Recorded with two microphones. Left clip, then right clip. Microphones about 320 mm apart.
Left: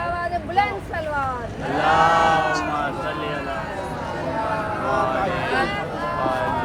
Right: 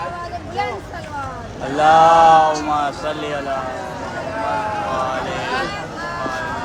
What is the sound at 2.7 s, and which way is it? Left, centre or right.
Speech, centre.